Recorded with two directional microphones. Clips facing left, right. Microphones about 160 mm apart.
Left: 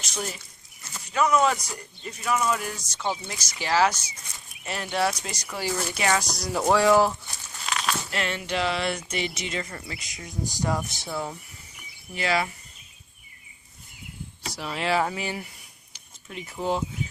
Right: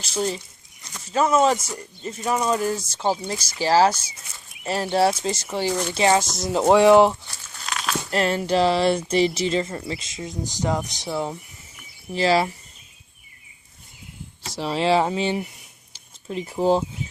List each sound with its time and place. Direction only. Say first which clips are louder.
0.0 s speech: right 8 dB; 30° right (ahead or behind)
7.6 s crumpling: even; centre (ahead or behind)
8.1 s speech: right 13 dB; 40° right (ahead or behind); by 11.3 s 20° right (ahead or behind)
12.1 s speech: right 7 dB; 30° right (ahead or behind)
14.5 s speech: right 6 dB; 30° right (ahead or behind)